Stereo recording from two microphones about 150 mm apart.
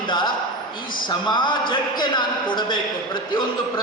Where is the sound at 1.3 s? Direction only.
30° left (ahead or behind).